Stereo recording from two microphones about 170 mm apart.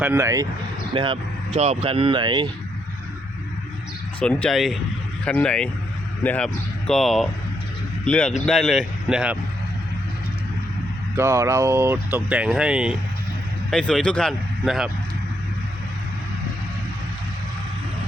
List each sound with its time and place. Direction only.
0.0 s speech: 15° right (ahead or behind)
0.9 s speech: 30° right (ahead or behind)
4.2 s speech: 10° left (ahead or behind)
11.2 s speech: 15° right (ahead or behind)